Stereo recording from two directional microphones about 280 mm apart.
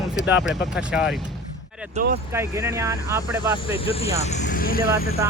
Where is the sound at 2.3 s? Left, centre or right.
Centre.